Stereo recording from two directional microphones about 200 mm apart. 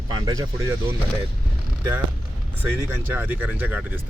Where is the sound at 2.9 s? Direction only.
10° right (ahead or behind).